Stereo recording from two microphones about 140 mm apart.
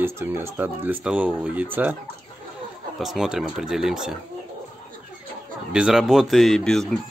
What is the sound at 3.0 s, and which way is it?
Speech, 5° right (ahead or behind).